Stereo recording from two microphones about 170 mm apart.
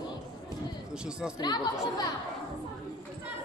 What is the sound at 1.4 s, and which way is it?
Speech, 25° left (ahead or behind).